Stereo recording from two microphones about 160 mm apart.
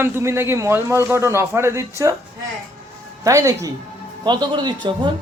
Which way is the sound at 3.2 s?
20° right (ahead or behind).